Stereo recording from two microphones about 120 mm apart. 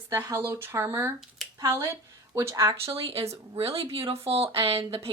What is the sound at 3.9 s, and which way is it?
Speech, 50° right (ahead or behind).